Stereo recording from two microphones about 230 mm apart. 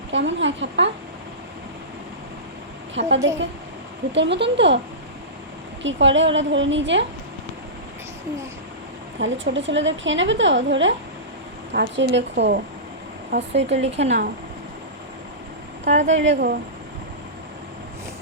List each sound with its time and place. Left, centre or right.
0.1 s a woman's voice: right
2.9 s a woman's voice: right
5.8 s a woman's voice: right
9.1 s a woman's voice: right
13.8 s speech: right
15.8 s a woman's voice: right